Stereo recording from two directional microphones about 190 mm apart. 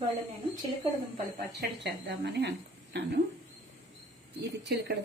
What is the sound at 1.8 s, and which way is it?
Speech, 65° right (ahead or behind).